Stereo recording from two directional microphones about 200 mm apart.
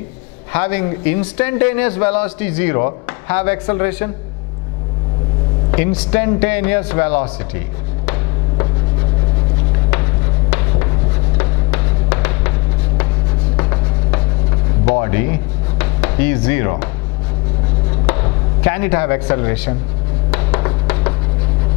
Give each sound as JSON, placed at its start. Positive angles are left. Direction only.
{"t": 0.5, "sound": "a man's voice", "side_deg": 10}
{"t": 5.7, "sound": "a man's voice", "side_deg": 10}
{"t": 10.5, "sound": "writing", "side_deg": 15}
{"t": 13.6, "sound": "a sound", "side_deg": 20}
{"t": 18.0, "sound": "speech", "side_deg": 15}
{"t": 20.2, "sound": "a sound", "side_deg": 15}